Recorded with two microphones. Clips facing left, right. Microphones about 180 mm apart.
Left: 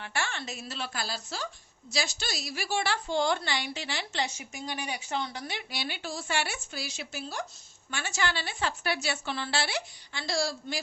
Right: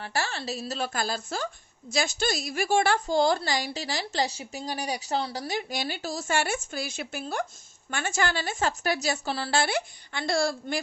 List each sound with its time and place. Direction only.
0.0 s a woman's voice: 35° right (ahead or behind); by 10.8 s 55° right (ahead or behind)